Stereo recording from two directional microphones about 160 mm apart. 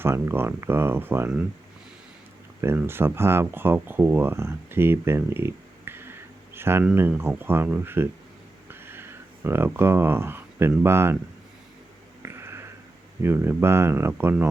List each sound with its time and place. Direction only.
0.0 s speech: 15° right (ahead or behind)
2.6 s speech: 15° right (ahead or behind)
12.2 s a sound: 15° right (ahead or behind)
13.2 s speech: 15° right (ahead or behind)